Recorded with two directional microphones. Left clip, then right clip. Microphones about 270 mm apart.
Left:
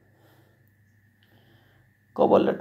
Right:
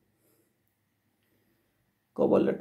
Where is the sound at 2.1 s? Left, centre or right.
Centre.